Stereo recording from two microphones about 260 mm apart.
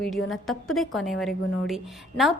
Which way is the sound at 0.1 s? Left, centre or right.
Centre.